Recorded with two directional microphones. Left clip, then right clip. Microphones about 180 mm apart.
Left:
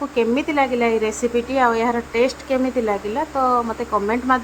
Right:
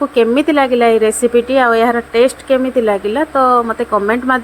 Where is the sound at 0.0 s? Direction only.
25° right (ahead or behind).